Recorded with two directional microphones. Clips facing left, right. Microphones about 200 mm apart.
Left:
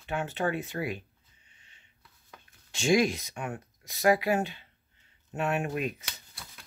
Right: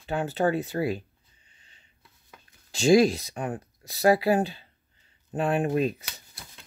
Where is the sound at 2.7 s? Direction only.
35° right (ahead or behind).